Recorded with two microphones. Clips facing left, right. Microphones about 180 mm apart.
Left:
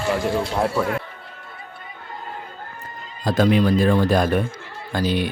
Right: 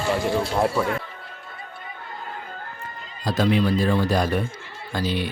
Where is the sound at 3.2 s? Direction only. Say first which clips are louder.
Left 3 dB; 50° left (ahead or behind).